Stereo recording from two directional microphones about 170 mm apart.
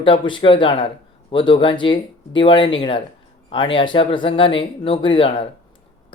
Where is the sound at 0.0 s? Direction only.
30° left (ahead or behind).